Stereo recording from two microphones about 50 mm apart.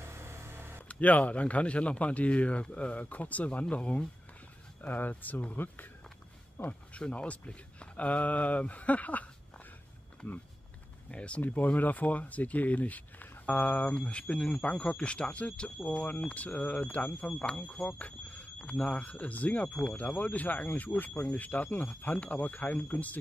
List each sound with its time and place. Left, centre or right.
0.0 s a sound: right
0.8 s speech: left
6.6 s speech: left
11.1 s speech: left
11.4 s speech: left